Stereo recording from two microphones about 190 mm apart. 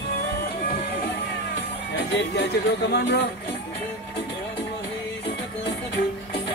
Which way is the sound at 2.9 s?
65° left (ahead or behind).